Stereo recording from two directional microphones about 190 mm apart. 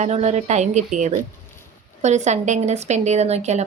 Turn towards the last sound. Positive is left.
turn(degrees=-35)  # may be behind; listen again after turning